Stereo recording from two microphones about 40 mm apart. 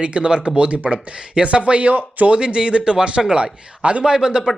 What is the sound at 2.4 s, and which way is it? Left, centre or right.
A man's voice, right.